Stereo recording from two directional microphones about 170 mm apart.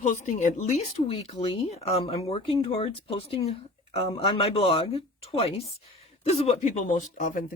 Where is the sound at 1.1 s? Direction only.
35° left (ahead or behind).